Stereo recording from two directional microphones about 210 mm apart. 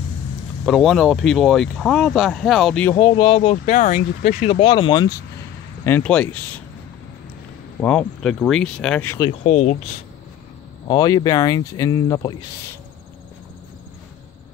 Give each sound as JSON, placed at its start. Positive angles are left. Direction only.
{"t": 0.7, "sound": "speech", "side_deg": 0}
{"t": 2.9, "sound": "speech", "side_deg": 20}
{"t": 5.9, "sound": "speech", "side_deg": 10}
{"t": 7.8, "sound": "speech", "side_deg": 5}
{"t": 9.4, "sound": "speech", "side_deg": 35}
{"t": 10.9, "sound": "speech", "side_deg": 20}